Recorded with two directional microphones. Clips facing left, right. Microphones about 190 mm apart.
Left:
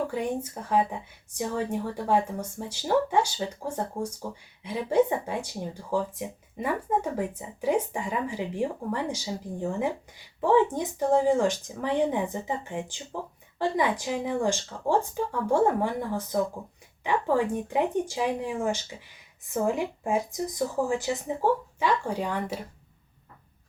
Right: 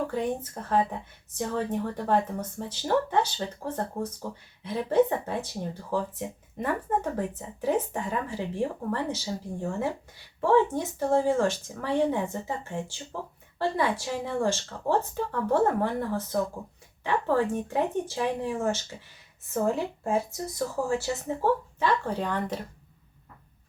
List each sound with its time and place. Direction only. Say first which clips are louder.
0.1 s speech: even; 10° left (ahead or behind)